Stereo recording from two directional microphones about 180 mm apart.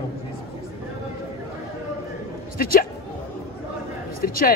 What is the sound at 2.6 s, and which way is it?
Speech, 55° left (ahead or behind).